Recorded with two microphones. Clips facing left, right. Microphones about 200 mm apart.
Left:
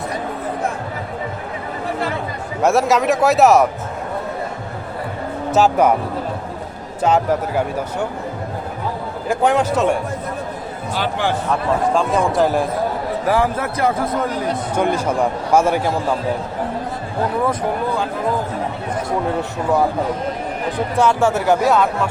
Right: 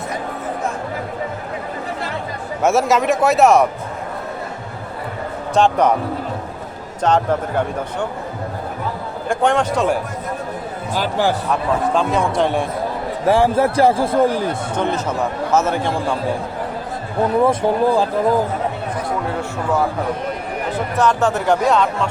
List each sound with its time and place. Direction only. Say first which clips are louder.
2.6 s a man's voice: even; centre (ahead or behind)
5.5 s a man's voice: left 1 dB; 5° left (ahead or behind)
7.0 s a man's voice: even; 5° left (ahead or behind)
9.3 s a man's voice: left 1 dB; 5° left (ahead or behind)
10.9 s speech: right 2 dB; 40° right (ahead or behind)
11.9 s a man's voice: left 1 dB; centre (ahead or behind)
13.2 s a man's voice: right 5 dB; 30° right (ahead or behind)
14.8 s a man's voice: left 3 dB; 10° left (ahead or behind)
17.4 s a man's voice: right 5 dB; 30° right (ahead or behind)
21.0 s a man's voice: left 1 dB; 10° left (ahead or behind)